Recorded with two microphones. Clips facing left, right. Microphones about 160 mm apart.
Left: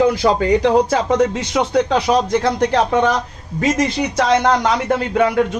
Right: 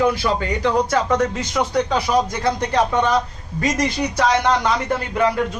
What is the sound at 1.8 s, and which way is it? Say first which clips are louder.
Speech: left 3 dB; 80° left.